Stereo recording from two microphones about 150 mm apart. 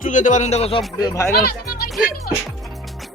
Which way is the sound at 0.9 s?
20° left (ahead or behind).